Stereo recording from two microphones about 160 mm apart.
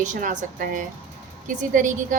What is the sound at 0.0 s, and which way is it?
A woman's voice, 50° right (ahead or behind).